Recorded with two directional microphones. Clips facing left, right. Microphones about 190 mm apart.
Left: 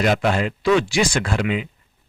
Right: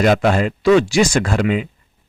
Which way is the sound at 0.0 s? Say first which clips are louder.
Right 4 dB; 45° right (ahead or behind).